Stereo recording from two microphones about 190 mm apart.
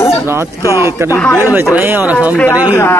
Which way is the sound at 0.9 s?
15° right (ahead or behind).